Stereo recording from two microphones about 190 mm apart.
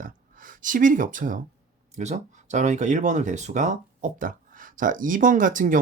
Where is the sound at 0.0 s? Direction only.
45° right (ahead or behind).